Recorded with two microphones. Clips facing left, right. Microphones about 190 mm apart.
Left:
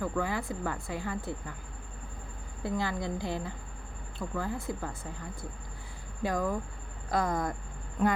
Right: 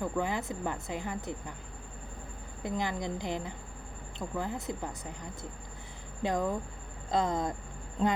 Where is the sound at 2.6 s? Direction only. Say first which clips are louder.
Left 1 dB; 20° right (ahead or behind).